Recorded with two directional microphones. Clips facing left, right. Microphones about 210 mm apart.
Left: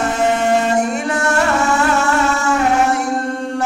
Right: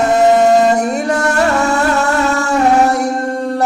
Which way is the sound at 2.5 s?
40° right (ahead or behind).